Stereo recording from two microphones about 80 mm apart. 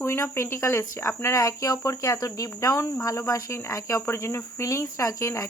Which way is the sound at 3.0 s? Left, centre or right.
Left.